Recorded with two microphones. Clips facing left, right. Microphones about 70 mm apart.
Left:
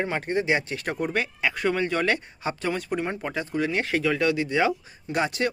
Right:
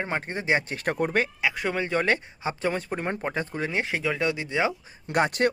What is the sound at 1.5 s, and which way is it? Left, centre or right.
Speech, centre.